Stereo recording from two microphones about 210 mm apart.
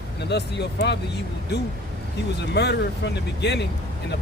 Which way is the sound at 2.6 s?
55° left (ahead or behind).